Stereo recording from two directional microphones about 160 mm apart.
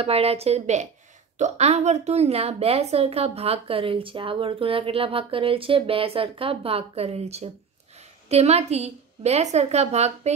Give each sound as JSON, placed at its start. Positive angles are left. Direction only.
{"t": 0.0, "sound": "a woman's voice", "side_deg": -40}